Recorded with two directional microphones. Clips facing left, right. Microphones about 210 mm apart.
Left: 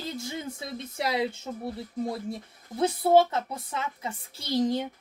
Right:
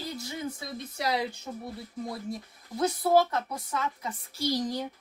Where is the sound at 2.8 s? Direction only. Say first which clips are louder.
Left 3 dB; 25° left (ahead or behind).